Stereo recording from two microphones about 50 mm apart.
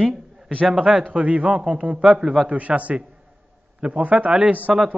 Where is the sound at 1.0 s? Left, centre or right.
Right.